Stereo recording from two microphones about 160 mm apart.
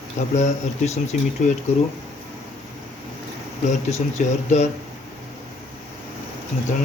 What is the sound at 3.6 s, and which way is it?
Speech, 45° left (ahead or behind).